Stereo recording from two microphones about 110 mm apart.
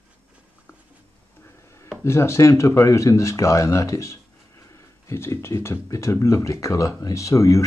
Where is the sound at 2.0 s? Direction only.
25° left (ahead or behind).